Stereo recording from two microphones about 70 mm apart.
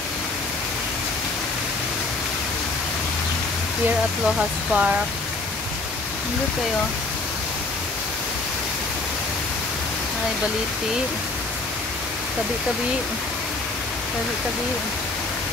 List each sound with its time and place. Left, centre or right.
4.4 s speech: centre